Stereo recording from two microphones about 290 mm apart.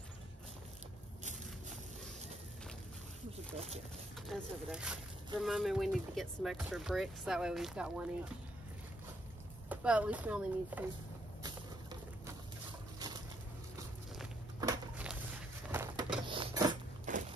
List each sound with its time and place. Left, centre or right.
3.5 s speech: right
4.3 s speech: centre
9.7 s speech: centre
11.4 s a sound: centre
14.6 s a sound: centre
17.1 s walk: right